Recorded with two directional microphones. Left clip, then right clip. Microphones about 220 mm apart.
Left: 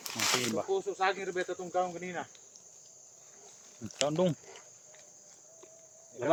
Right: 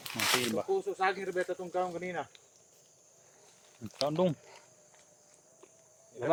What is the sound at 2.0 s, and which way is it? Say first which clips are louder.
Cricket: right 2 dB; 55° right (ahead or behind).